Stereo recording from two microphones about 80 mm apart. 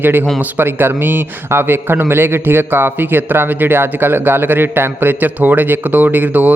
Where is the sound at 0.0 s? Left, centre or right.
Right.